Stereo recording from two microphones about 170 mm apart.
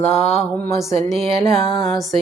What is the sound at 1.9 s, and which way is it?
Speech, centre (ahead or behind).